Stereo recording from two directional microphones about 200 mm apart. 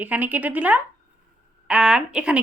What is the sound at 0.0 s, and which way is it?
A woman's voice, 10° right (ahead or behind).